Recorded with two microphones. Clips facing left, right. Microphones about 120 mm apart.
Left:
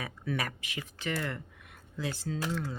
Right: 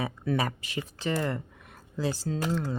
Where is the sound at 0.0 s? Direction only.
30° right (ahead or behind).